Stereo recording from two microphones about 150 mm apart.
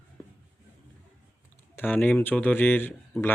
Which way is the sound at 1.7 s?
10° left (ahead or behind).